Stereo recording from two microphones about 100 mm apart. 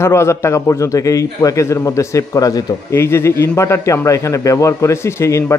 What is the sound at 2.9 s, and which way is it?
A man's voice, 25° left (ahead or behind).